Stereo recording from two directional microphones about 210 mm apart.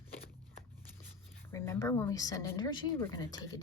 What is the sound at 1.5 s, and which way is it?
A woman's voice, 10° left (ahead or behind).